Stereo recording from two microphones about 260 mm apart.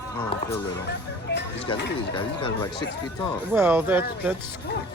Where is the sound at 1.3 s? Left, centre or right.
Left.